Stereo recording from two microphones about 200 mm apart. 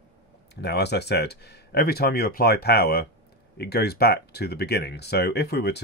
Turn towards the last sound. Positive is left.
turn(degrees=55)  # may be behind; listen again after turning